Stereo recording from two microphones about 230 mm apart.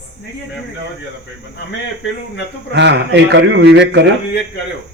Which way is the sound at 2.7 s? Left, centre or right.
Right.